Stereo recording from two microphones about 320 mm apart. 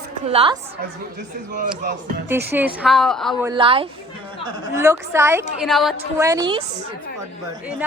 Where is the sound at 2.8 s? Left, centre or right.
Centre.